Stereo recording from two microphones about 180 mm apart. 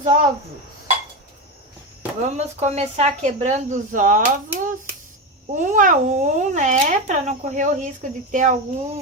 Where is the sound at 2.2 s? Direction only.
40° right (ahead or behind).